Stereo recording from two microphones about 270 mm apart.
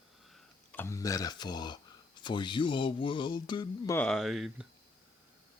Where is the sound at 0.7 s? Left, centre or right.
Centre.